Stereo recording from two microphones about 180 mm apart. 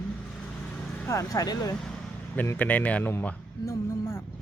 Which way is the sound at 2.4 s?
10° left (ahead or behind).